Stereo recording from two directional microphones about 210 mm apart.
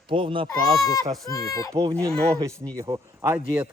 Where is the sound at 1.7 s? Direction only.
15° right (ahead or behind).